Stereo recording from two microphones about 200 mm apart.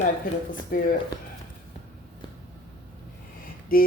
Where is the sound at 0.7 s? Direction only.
45° left (ahead or behind).